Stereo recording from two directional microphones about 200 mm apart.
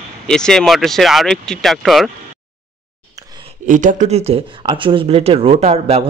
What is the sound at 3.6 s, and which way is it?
Speech, 40° right (ahead or behind).